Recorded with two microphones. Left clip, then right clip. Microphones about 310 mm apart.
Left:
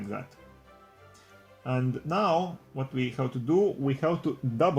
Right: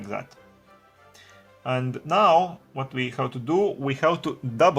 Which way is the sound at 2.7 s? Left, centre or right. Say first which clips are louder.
Right 4 dB; right.